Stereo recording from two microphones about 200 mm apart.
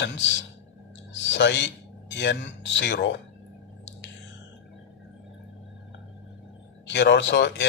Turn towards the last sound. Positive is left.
turn(degrees=60)  # may be behind; listen again after turning